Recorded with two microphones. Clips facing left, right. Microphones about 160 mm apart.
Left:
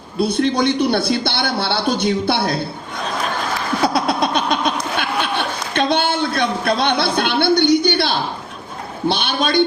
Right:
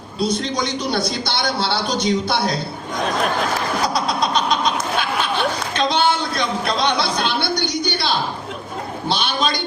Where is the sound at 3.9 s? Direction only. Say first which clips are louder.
Left 2 dB; 55° left (ahead or behind).